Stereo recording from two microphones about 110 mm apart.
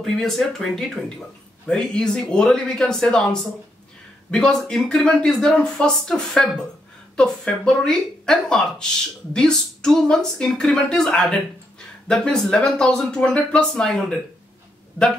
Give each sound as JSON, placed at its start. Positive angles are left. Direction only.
{"t": 0.0, "sound": "speech", "side_deg": 5}